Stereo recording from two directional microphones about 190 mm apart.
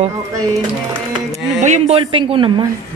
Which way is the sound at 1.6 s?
35° right (ahead or behind).